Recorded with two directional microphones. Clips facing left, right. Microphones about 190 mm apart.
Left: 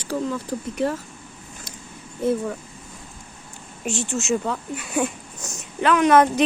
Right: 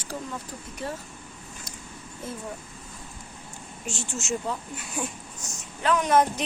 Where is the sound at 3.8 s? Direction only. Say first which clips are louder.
Left 9 dB; 65° left (ahead or behind).